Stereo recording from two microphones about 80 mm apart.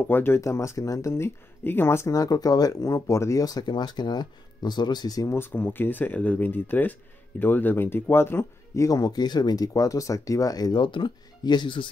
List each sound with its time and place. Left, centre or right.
0.1 s speech: left
2.0 s speech: left
5.3 s speech: left
10.8 s speech: left